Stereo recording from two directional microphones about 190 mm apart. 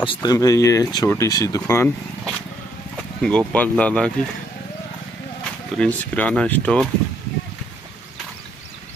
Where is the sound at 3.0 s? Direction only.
5° left (ahead or behind).